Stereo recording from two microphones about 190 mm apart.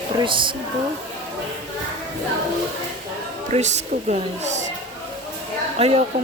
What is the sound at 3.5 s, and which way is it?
A woman's voice, 35° right (ahead or behind).